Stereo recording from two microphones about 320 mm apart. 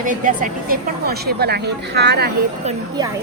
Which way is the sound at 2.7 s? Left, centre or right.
Centre.